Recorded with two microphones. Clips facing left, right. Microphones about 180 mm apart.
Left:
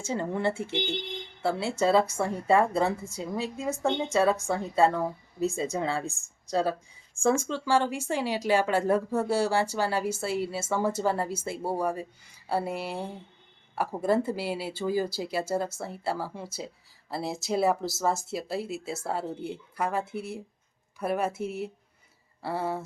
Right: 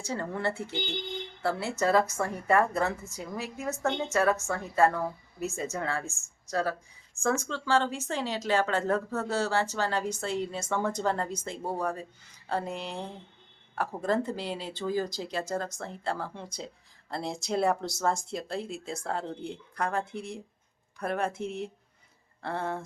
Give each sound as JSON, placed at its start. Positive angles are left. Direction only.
{"t": 0.1, "sound": "a woman's voice", "side_deg": 20}
{"t": 3.0, "sound": "a woman's voice", "side_deg": 30}
{"t": 3.6, "sound": "speech", "side_deg": 15}
{"t": 4.2, "sound": "a woman's voice", "side_deg": 30}
{"t": 4.8, "sound": "speech", "side_deg": 15}
{"t": 6.1, "sound": "a woman's voice", "side_deg": 35}
{"t": 7.4, "sound": "speech", "side_deg": 15}